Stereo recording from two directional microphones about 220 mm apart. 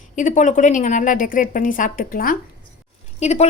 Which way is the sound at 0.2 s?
35° left (ahead or behind).